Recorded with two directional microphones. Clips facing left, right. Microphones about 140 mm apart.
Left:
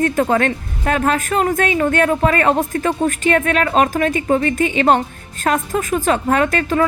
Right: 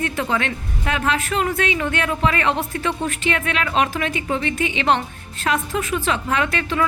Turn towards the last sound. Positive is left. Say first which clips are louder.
# left 5 dB
turn(degrees=45)  # may be behind; listen again after turning